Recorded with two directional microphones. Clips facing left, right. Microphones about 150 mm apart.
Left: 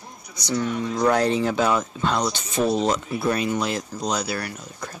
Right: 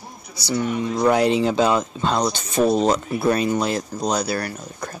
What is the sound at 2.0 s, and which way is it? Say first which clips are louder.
Speech: right 2 dB; 35° right (ahead or behind).